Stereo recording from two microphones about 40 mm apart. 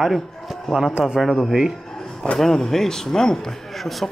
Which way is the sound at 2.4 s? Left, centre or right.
Centre.